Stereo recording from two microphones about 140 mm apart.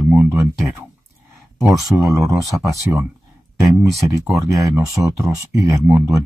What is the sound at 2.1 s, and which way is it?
Speech, 25° right (ahead or behind).